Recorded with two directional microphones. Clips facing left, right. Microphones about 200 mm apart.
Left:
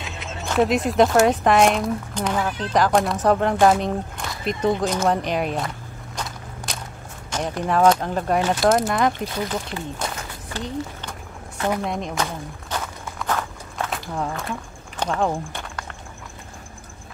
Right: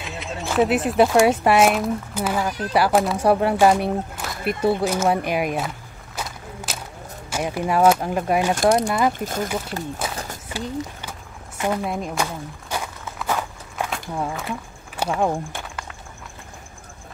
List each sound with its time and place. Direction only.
0.0 s speech: centre (ahead or behind)
6.1 s walk: 5° right (ahead or behind)
7.2 s speech: 10° right (ahead or behind)
8.6 s speech: 5° left (ahead or behind)
9.2 s speech: 45° right (ahead or behind)
10.0 s speech: 5° right (ahead or behind)
10.5 s a sound: 10° right (ahead or behind)
11.8 s walk: 5° right (ahead or behind)
13.8 s a sound: 5° right (ahead or behind)